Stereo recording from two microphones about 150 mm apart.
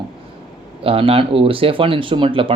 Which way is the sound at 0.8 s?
40° right (ahead or behind).